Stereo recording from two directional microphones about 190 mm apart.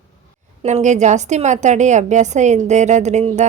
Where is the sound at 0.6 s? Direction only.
40° right (ahead or behind).